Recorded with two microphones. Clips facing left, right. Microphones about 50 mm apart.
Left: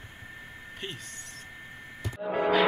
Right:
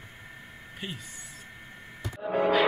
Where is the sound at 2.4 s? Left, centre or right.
Centre.